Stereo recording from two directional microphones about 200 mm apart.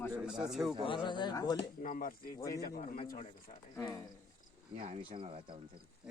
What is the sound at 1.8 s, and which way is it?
A man's voice, 45° left (ahead or behind).